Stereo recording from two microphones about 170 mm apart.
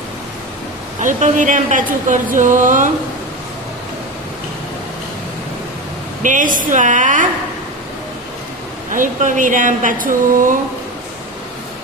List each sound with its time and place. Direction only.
1.0 s a woman's voice: 50° right (ahead or behind)
6.2 s a woman's voice: 50° right (ahead or behind)
8.9 s a woman's voice: 50° right (ahead or behind)